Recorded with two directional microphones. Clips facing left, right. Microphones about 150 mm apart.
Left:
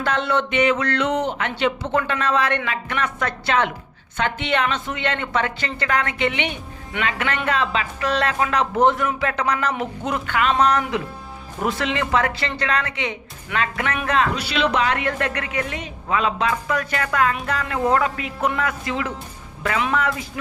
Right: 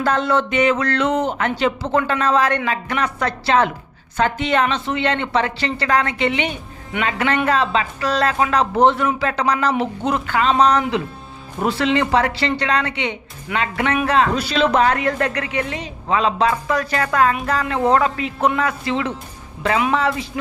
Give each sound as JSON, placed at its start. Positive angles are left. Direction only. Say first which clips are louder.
{"t": 0.0, "sound": "a woman's voice", "louder": "right 3 dB", "side_deg": -40}
{"t": 14.3, "sound": "a woman's voice", "louder": "right 4 dB", "side_deg": -40}